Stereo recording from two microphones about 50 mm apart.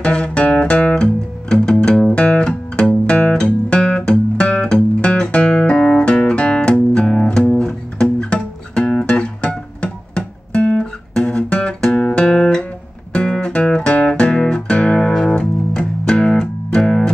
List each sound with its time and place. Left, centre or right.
0.0 s music: left
2.1 s guitar: left
7.3 s music: left
11.3 s guitar: left
13.1 s music: left